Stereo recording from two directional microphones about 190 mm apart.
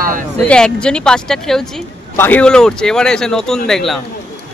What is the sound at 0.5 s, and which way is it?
Speech, 5° left (ahead or behind).